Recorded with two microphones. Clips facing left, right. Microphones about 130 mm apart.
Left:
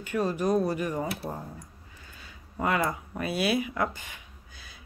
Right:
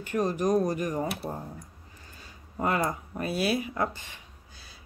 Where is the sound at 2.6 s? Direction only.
40° right (ahead or behind).